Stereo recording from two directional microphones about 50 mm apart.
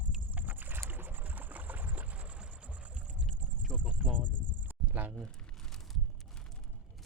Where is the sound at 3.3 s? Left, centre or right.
Right.